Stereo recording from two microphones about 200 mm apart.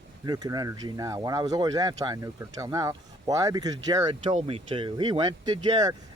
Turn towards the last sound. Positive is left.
turn(degrees=-20)  # may be behind; listen again after turning